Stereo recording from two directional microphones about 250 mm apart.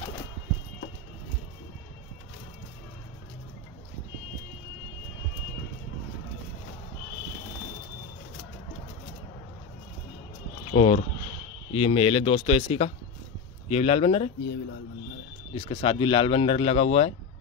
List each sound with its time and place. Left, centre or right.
10.7 s speech: left
15.5 s speech: centre